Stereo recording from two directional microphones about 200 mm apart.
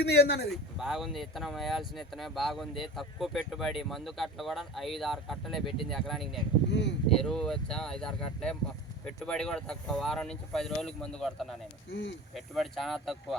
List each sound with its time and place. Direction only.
0.0 s speech: 55° left (ahead or behind)
0.5 s speech: centre (ahead or behind)
6.7 s speech: 60° left (ahead or behind)
7.2 s speech: centre (ahead or behind)
11.9 s speech: 60° left (ahead or behind)
12.5 s speech: centre (ahead or behind)